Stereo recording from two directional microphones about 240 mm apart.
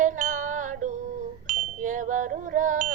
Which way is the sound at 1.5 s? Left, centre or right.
Right.